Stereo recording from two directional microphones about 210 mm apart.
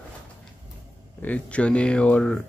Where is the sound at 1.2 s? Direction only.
5° left (ahead or behind).